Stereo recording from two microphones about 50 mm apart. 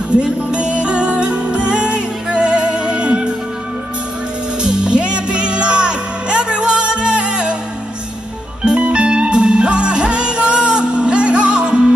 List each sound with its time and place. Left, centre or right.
0.1 s music: right
4.6 s music: centre
8.7 s music: right